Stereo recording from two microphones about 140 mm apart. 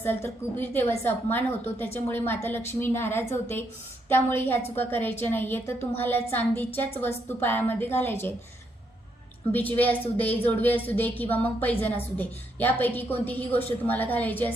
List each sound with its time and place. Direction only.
0.0 s a woman's voice: 15° left (ahead or behind)
9.5 s a woman's voice: 10° left (ahead or behind)